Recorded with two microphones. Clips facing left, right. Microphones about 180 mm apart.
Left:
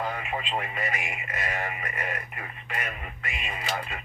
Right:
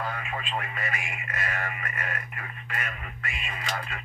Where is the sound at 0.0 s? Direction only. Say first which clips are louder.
Left 2 dB; 20° left (ahead or behind).